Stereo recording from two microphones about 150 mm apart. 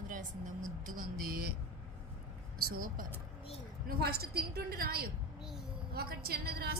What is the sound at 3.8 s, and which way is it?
A woman's voice, 90° right.